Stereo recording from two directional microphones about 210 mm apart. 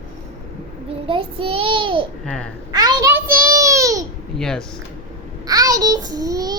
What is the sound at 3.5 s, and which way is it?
Babbling, 15° right (ahead or behind).